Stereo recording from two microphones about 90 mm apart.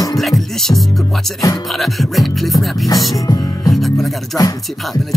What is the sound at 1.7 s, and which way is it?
Speech, centre (ahead or behind).